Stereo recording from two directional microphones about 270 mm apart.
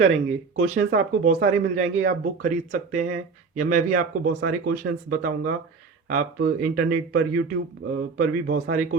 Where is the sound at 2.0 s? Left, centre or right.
Right.